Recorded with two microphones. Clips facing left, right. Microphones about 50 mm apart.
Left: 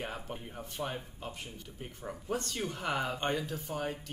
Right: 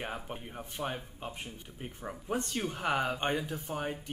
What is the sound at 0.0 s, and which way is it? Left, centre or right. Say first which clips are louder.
Speech: right 1 dB; centre.